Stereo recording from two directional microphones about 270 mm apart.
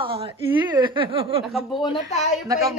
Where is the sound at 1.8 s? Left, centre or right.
Left.